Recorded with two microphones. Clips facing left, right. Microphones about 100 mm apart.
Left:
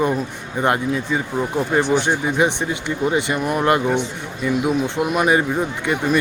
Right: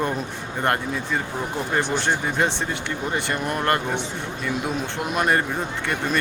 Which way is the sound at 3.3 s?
10° left (ahead or behind).